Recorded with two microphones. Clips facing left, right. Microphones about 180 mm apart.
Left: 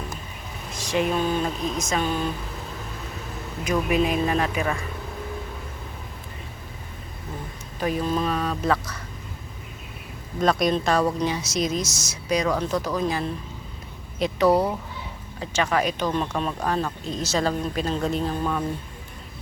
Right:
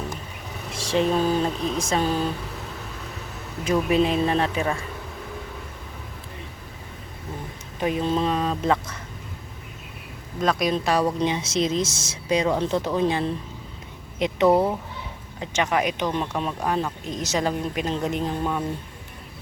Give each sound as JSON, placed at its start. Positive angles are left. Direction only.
{"t": 0.7, "sound": "speech", "side_deg": -30}
{"t": 3.6, "sound": "speech", "side_deg": -30}
{"t": 7.8, "sound": "speech", "side_deg": -20}
{"t": 10.4, "sound": "speech", "side_deg": 0}
{"t": 11.2, "sound": "speech", "side_deg": -25}